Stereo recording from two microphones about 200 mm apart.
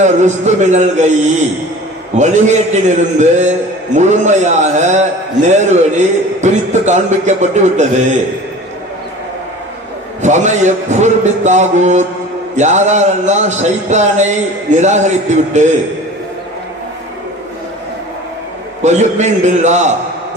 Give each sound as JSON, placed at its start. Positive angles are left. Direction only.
{"t": 0.0, "sound": "speech", "side_deg": -35}
{"t": 10.2, "sound": "speech", "side_deg": -35}
{"t": 18.8, "sound": "speech", "side_deg": -35}